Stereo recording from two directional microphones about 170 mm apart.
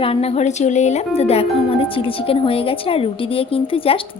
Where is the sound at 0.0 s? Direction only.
35° left (ahead or behind).